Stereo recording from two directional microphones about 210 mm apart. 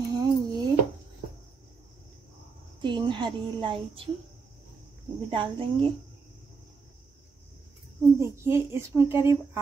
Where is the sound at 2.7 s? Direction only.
20° right (ahead or behind).